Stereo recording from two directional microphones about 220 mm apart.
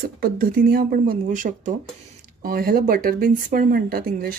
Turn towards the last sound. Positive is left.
turn(degrees=-45)  # may be behind; listen again after turning